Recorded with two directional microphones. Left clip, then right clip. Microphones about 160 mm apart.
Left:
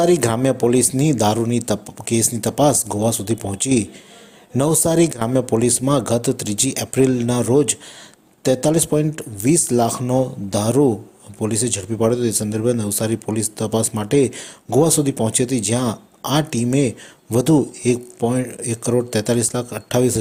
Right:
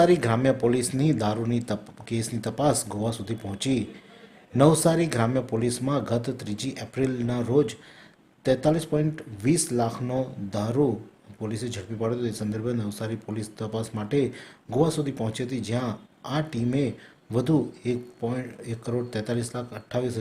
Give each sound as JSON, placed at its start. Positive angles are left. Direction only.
{"t": 0.0, "sound": "speech", "side_deg": 35}